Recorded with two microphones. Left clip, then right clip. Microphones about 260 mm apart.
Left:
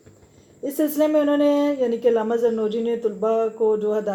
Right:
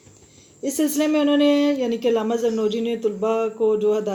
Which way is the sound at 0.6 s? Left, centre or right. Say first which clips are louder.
Left 1 dB; right.